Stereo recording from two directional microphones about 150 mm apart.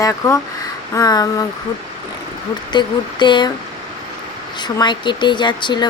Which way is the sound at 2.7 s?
30° left (ahead or behind).